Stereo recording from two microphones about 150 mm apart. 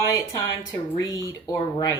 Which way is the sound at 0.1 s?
25° left (ahead or behind).